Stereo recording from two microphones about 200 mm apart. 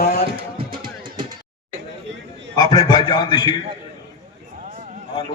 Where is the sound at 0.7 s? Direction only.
45° right (ahead or behind).